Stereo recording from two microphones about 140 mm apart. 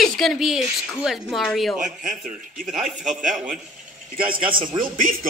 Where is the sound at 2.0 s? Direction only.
70° right (ahead or behind).